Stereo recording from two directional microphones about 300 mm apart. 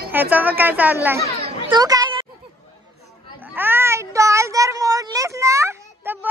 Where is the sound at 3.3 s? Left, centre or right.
Centre.